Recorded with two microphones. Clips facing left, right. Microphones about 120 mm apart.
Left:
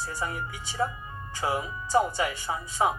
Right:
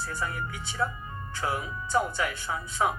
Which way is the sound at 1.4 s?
15° left (ahead or behind).